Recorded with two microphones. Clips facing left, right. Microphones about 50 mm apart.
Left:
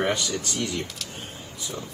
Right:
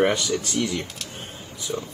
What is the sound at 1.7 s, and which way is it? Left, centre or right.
Speech, centre.